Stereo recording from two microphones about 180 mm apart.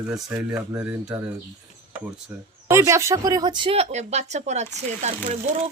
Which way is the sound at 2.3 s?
10° right (ahead or behind).